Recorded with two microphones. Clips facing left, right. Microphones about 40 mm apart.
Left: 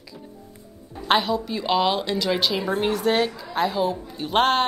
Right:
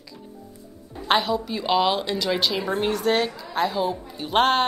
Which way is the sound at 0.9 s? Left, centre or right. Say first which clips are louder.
Left 1 dB; centre.